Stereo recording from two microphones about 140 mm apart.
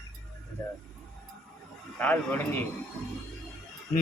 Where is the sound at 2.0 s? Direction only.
15° left (ahead or behind).